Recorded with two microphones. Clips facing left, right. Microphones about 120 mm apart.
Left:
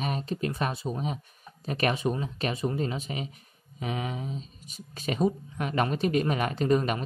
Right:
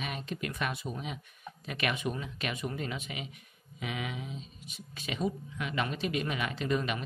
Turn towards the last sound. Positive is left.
turn(degrees=40)  # may be behind; listen again after turning